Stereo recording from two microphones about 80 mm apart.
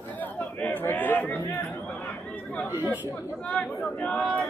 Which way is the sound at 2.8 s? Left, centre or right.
Right.